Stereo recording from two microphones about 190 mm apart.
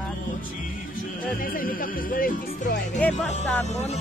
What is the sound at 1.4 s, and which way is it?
Speech, 50° left (ahead or behind).